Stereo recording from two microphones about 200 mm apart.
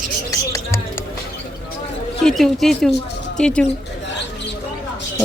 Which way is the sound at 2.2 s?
Centre (ahead or behind).